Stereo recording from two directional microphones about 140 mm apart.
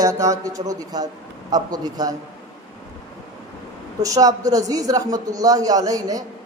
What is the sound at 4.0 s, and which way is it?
A man's voice, 25° right (ahead or behind).